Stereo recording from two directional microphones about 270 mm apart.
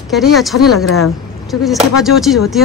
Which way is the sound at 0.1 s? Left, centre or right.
Centre.